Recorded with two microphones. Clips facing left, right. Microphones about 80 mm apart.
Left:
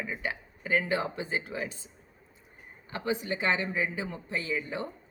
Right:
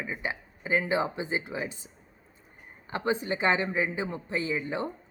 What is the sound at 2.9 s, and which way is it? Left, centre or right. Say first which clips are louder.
Speech: right 3 dB; right.